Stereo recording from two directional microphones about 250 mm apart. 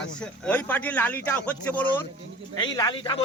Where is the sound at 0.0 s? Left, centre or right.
Centre.